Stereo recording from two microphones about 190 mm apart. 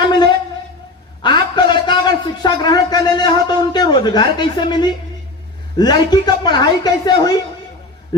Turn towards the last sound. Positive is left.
turn(degrees=20)  # may be behind; listen again after turning